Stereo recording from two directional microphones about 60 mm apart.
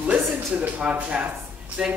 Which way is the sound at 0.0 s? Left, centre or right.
Right.